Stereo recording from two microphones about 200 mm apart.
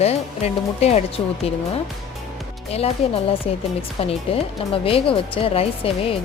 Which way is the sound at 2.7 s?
30° left (ahead or behind).